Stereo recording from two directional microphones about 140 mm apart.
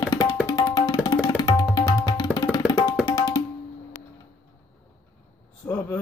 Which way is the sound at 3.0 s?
25° left (ahead or behind).